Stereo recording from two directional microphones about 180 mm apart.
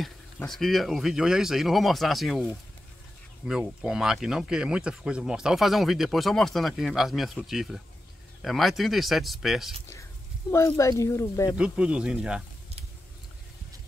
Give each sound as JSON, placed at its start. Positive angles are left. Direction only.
{"t": 0.4, "sound": "speech", "side_deg": 0}
{"t": 3.4, "sound": "speech", "side_deg": -5}
{"t": 10.5, "sound": "speech", "side_deg": 15}
{"t": 11.5, "sound": "speech", "side_deg": -5}